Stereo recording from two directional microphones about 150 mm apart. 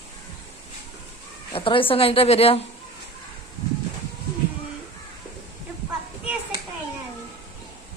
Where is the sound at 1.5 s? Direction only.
35° left (ahead or behind).